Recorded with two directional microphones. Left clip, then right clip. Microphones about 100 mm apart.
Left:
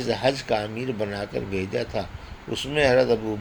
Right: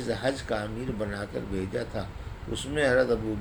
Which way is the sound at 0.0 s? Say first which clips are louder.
Left 6 dB; 50° left (ahead or behind).